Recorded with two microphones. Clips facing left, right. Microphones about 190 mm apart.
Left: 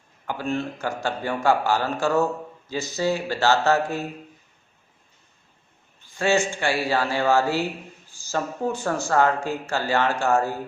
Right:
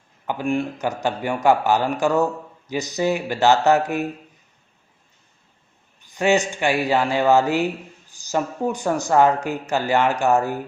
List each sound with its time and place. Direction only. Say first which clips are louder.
0.3 s speech: right 4 dB; 15° right (ahead or behind)
6.0 s speech: right 3 dB; 15° right (ahead or behind)